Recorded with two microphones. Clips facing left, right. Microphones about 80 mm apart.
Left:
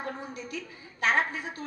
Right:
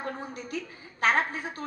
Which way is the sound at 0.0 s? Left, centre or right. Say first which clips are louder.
Right 1 dB; right.